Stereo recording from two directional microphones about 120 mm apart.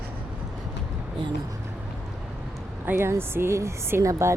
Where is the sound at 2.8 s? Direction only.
20° right (ahead or behind).